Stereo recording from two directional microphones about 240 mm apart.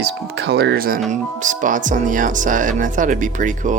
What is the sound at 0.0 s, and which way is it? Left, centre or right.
Speech, right.